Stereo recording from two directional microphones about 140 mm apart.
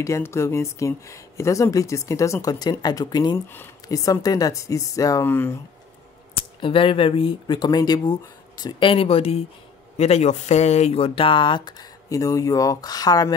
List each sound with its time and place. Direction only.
0.0 s speech: 20° left (ahead or behind)
6.3 s speech: 40° left (ahead or behind)